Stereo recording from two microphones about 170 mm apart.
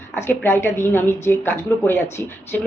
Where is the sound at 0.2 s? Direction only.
15° left (ahead or behind).